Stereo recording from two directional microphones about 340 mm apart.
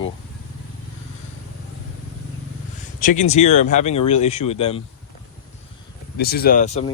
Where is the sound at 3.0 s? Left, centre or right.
Left.